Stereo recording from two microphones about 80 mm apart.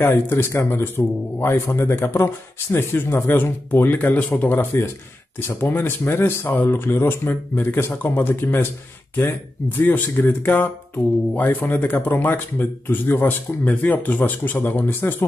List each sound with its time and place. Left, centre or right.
0.0 s speech: left
9.8 s speech: left